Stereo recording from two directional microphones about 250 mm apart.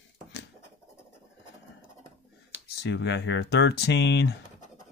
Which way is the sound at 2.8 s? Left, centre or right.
Left.